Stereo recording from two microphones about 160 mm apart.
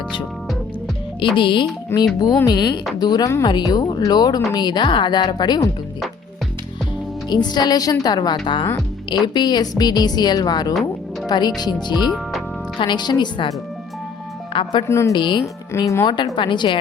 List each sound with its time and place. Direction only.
1.4 s speech: 30° left (ahead or behind)
1.9 s a woman's voice: 15° left (ahead or behind)
7.3 s speech: 25° left (ahead or behind)
14.5 s speech: 30° left (ahead or behind)
14.8 s a woman's voice: 15° left (ahead or behind)
15.1 s speech: 30° left (ahead or behind)
15.7 s speech: 20° left (ahead or behind)